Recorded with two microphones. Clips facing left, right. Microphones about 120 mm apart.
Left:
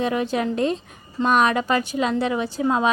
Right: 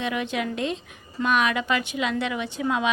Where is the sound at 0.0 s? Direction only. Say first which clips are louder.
Left 5 dB; 35° left (ahead or behind).